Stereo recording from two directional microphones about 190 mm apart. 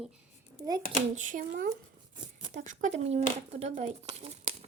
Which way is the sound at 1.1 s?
40° right (ahead or behind).